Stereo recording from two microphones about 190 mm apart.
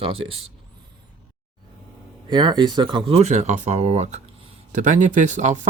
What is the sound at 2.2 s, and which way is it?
Speech, 25° right (ahead or behind).